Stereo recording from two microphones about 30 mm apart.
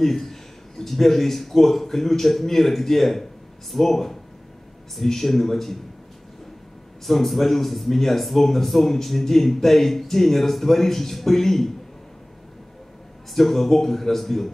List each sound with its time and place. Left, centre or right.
0.0 s a man's voice: centre
7.1 s a man's voice: centre
13.3 s a man's voice: centre